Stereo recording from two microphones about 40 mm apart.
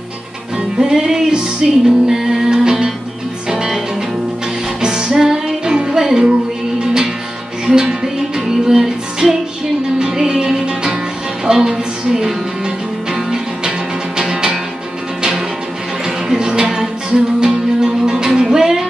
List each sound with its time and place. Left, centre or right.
0.7 s music: centre
4.8 s music: centre
7.6 s music: centre
16.3 s music: centre